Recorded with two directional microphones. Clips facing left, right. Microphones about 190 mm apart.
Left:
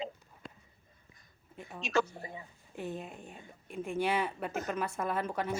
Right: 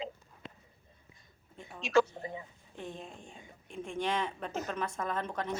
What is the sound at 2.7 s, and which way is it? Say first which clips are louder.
Speech: left 4 dB; 5° left (ahead or behind).